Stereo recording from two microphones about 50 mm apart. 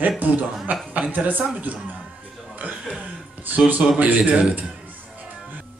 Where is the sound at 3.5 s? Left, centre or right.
Right.